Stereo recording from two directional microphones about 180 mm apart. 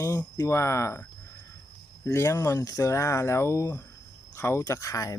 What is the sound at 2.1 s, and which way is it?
Speech, 15° left (ahead or behind).